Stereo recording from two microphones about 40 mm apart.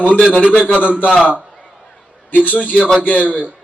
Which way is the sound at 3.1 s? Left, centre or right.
Right.